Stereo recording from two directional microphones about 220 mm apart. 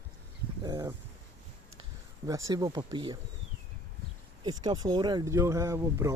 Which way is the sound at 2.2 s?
15° right (ahead or behind).